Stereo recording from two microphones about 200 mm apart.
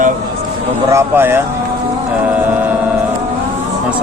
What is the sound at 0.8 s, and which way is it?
Speech, 10° right (ahead or behind).